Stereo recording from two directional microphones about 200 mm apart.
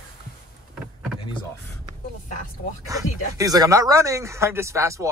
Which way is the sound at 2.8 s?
15° right (ahead or behind).